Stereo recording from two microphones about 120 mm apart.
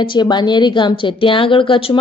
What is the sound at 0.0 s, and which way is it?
A woman's voice, 40° left (ahead or behind).